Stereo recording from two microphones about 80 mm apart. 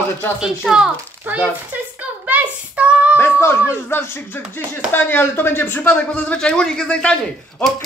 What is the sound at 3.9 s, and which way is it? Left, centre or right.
Speech, left.